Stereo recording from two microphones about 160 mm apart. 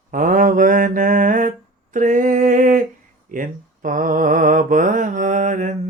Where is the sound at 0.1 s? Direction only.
55° right (ahead or behind).